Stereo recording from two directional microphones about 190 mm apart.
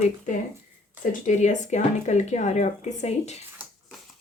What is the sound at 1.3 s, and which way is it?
A woman's voice, 40° left (ahead or behind).